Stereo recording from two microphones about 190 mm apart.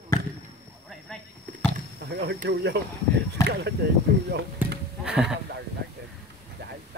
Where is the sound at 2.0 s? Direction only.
60° right (ahead or behind).